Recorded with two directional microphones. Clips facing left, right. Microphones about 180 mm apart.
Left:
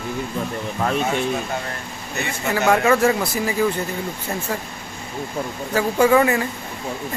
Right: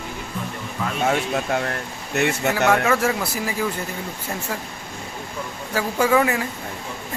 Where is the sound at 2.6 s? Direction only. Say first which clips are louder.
Left 4 dB; 5° right (ahead or behind).